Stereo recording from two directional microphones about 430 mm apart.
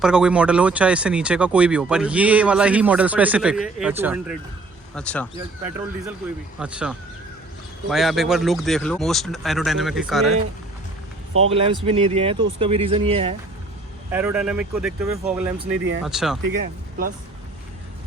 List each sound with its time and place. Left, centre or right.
0.0 s speech: centre
11.4 s speech: centre